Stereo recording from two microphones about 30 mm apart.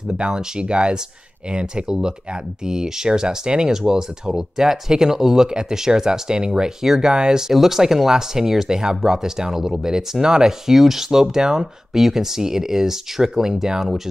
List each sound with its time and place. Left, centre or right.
0.2 s speech: right
7.5 s speech: centre
10.2 s speech: right
10.7 s speech: centre